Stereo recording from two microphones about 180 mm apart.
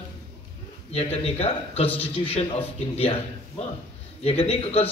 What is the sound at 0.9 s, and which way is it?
A man's voice, 35° left (ahead or behind).